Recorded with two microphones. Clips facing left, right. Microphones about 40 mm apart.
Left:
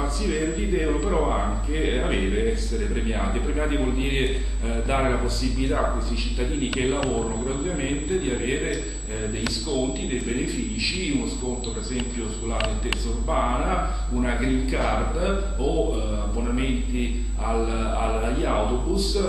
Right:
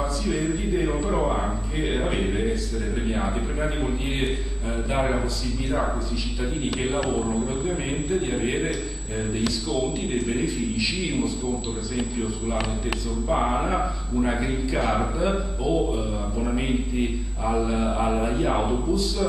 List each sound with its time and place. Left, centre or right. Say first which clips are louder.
0.2 s speech: even; left
0.8 s a man's voice: left 1 dB; centre
3.6 s a man's voice: left 2 dB; centre
7.0 s a man's voice: right 1 dB; centre
13.3 s a man's voice: even; centre